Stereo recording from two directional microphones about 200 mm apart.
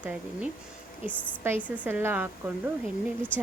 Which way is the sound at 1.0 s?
5° left (ahead or behind).